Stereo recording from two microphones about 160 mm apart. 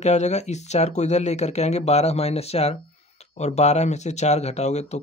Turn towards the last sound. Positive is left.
turn(degrees=45)  # may be behind; listen again after turning